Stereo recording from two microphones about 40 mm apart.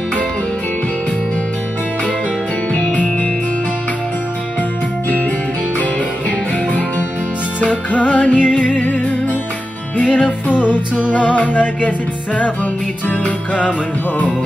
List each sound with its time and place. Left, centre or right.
2.7 s music: left
7.6 s music: left
13.2 s music: left